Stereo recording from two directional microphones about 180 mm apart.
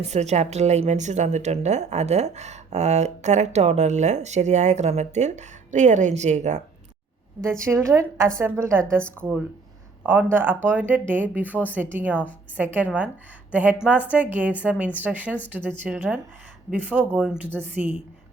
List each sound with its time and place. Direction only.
0.0 s a woman's voice: 40° right (ahead or behind)
7.6 s speech: 15° right (ahead or behind)
10.0 s a woman's voice: 10° right (ahead or behind)